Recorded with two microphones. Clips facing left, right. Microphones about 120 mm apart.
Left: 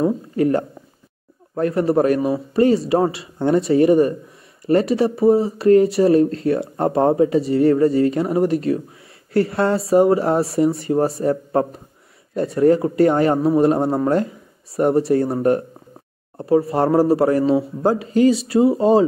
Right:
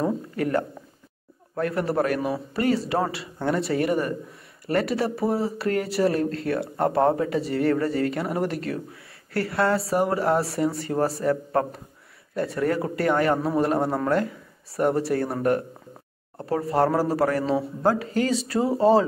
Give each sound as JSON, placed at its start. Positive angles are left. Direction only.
{"t": 0.4, "sound": "a man's voice", "side_deg": 25}